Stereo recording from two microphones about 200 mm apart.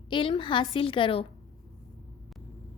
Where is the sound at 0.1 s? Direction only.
25° left (ahead or behind).